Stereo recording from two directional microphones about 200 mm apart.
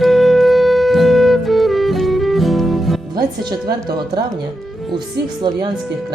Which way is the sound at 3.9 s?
20° right (ahead or behind).